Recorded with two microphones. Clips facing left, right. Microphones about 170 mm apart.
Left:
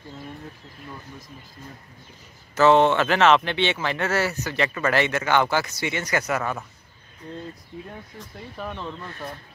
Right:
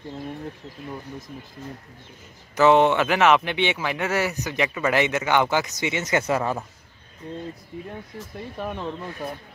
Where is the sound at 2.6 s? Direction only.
15° right (ahead or behind).